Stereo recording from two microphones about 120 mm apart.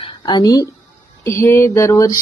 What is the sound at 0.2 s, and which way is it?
A woman's voice, 35° left (ahead or behind).